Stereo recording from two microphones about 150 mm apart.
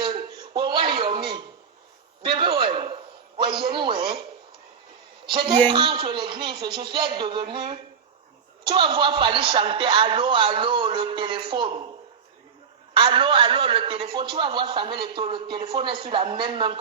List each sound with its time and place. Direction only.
0.0 s a sound: 30° right (ahead or behind)
5.3 s a man's voice: 35° right (ahead or behind)
13.0 s a man's voice: 35° right (ahead or behind)